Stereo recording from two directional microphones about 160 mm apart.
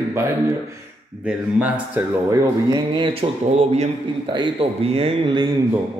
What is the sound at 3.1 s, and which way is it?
Speech, 40° right (ahead or behind).